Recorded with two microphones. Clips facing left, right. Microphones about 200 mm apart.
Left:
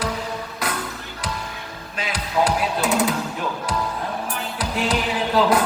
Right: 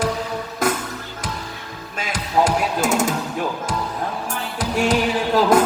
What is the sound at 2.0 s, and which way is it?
Music, 45° right (ahead or behind).